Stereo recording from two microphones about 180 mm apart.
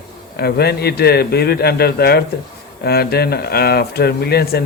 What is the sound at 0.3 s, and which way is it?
A man's voice, 60° left (ahead or behind).